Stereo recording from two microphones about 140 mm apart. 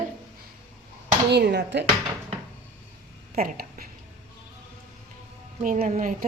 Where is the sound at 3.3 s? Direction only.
90° right.